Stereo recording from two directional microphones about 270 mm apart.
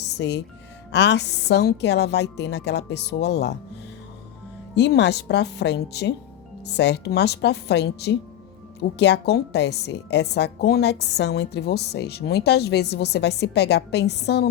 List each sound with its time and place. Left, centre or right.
0.0 s music: left
0.9 s a woman's voice: left
4.7 s a woman's voice: left